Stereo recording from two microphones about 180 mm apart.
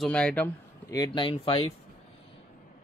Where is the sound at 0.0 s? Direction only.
5° left (ahead or behind).